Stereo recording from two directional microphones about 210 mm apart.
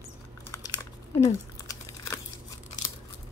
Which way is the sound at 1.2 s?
15° left (ahead or behind).